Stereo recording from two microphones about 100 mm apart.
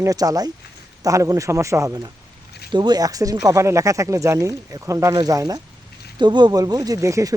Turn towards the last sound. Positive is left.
turn(degrees=-35)  # may be behind; listen again after turning